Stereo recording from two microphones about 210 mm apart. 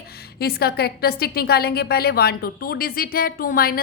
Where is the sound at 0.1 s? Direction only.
50° left (ahead or behind).